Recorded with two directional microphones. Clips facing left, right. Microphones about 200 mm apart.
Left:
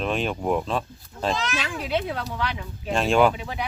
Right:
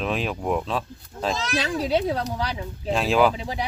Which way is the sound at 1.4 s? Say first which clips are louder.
Right 4 dB; 35° right (ahead or behind).